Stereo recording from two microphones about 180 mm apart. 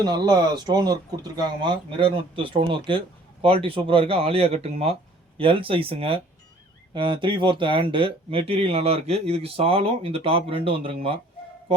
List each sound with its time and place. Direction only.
0.0 s speech: 20° right (ahead or behind)